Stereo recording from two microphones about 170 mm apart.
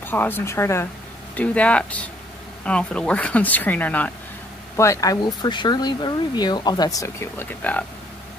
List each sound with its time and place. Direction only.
0.0 s speech: 10° left (ahead or behind)